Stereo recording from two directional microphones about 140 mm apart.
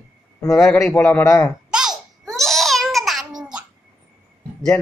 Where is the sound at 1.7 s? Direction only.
5° right (ahead or behind).